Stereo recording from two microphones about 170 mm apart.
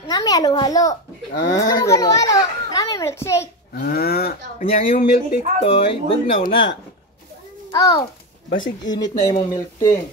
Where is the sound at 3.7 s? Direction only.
65° left (ahead or behind).